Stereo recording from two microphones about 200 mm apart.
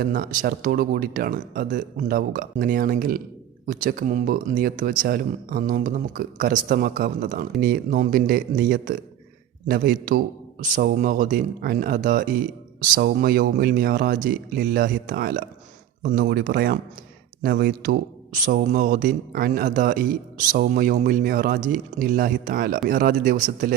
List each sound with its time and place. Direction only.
0.1 s a man's voice: 45° right (ahead or behind)